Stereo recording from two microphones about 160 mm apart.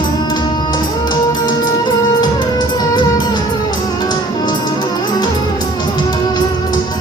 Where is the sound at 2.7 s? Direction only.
25° left (ahead or behind).